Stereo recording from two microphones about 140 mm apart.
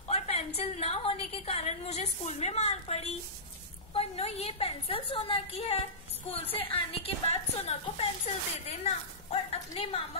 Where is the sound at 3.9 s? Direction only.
45° left (ahead or behind).